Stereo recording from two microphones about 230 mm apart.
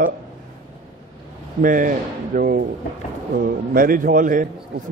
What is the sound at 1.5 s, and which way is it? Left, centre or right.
A man's voice, right.